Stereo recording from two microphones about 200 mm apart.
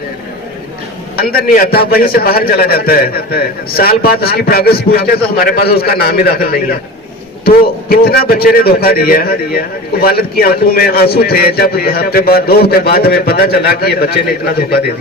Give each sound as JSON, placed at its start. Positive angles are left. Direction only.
{"t": 1.1, "sound": "a man's voice", "side_deg": 50}